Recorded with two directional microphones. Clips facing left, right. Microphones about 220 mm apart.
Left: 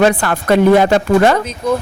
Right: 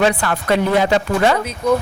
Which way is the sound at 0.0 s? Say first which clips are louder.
Left 4 dB; 45° left (ahead or behind).